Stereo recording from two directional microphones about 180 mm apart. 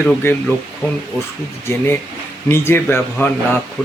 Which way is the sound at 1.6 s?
15° left (ahead or behind).